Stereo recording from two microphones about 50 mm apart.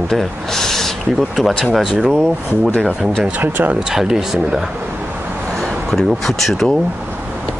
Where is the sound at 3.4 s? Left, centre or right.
Right.